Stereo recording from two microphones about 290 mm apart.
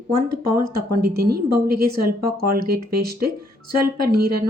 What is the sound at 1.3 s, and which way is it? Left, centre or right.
Speech, right.